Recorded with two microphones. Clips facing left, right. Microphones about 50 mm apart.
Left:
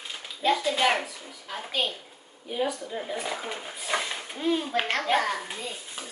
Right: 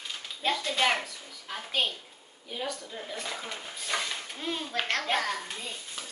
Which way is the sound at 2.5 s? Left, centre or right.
Centre.